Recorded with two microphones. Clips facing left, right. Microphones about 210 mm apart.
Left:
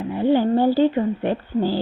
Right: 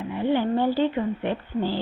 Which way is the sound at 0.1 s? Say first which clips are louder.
Left 5 dB; 40° left (ahead or behind).